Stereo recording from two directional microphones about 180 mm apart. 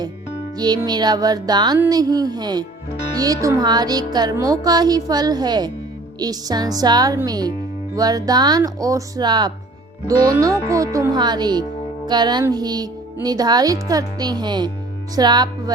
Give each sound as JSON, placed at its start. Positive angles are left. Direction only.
{"t": 0.5, "sound": "speech", "side_deg": -25}